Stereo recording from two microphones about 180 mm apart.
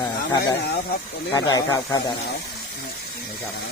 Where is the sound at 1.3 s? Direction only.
20° left (ahead or behind).